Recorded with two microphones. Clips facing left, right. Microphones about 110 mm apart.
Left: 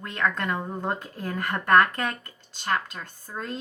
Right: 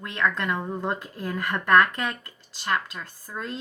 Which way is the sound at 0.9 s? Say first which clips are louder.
Right 1 dB; 25° left (ahead or behind).